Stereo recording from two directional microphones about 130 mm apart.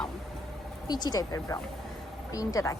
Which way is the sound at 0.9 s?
30° left (ahead or behind).